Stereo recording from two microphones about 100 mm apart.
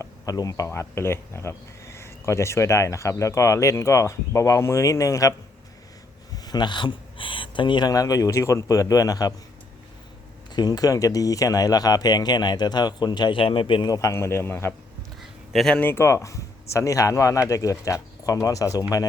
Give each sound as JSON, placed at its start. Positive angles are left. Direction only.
{"t": 0.0, "sound": "speech", "side_deg": 35}
{"t": 6.3, "sound": "speech", "side_deg": 40}
{"t": 10.5, "sound": "speech", "side_deg": 40}
{"t": 13.4, "sound": "a man's voice", "side_deg": 60}
{"t": 13.8, "sound": "speech", "side_deg": 35}
{"t": 15.2, "sound": "a sound", "side_deg": 0}
{"t": 15.7, "sound": "speech", "side_deg": 20}